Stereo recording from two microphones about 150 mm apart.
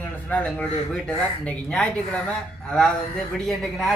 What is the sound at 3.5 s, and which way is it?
Speech, centre (ahead or behind).